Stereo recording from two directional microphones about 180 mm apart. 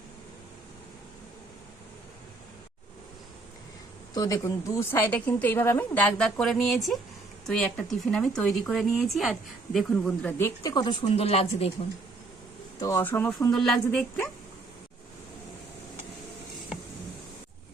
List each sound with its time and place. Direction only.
4.1 s a woman's voice: 20° left (ahead or behind)
11.0 s speech: 35° left (ahead or behind)
12.8 s a woman's voice: 15° left (ahead or behind)